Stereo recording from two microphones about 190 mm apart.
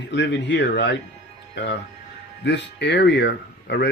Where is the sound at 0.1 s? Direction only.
65° left (ahead or behind).